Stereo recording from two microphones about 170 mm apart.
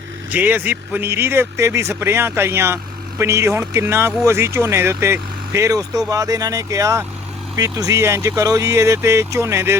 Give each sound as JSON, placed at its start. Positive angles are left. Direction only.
{"t": 0.3, "sound": "speech", "side_deg": -10}